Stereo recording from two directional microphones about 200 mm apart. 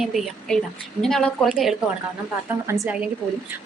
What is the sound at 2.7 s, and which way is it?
Speech, 15° right (ahead or behind).